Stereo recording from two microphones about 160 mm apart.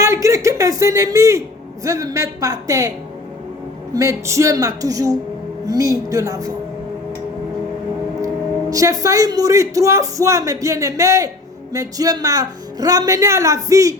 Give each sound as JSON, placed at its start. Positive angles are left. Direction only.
{"t": 0.0, "sound": "a sound", "side_deg": -20}
{"t": 1.8, "sound": "speech", "side_deg": -20}
{"t": 3.9, "sound": "speech", "side_deg": -20}
{"t": 8.7, "sound": "speech", "side_deg": -20}